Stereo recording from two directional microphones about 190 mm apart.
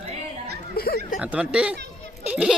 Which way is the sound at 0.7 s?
55° left (ahead or behind).